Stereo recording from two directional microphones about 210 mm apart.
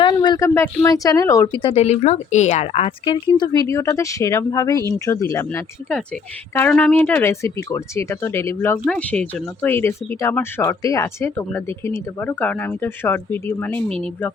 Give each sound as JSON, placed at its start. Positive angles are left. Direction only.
{"t": 0.0, "sound": "speech", "side_deg": 20}